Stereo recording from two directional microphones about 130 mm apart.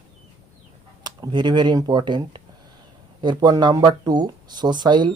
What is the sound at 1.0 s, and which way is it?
Speech, 35° right (ahead or behind).